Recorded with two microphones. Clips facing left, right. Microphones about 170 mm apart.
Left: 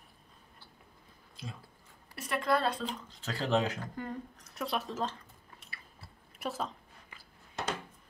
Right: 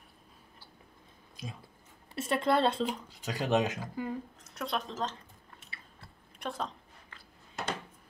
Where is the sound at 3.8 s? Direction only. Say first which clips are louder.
Right 3 dB; 5° right (ahead or behind).